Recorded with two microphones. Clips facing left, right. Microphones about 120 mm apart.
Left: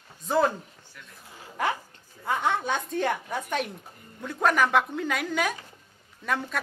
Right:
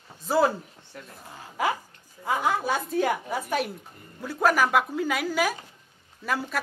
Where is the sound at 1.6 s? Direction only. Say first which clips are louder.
Right 1 dB; 5° right (ahead or behind).